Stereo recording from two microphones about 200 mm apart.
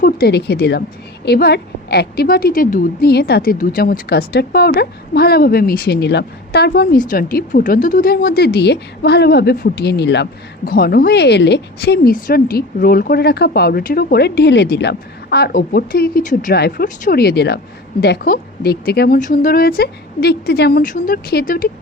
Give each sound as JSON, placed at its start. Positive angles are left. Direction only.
{"t": 0.0, "sound": "a woman's voice", "side_deg": 50}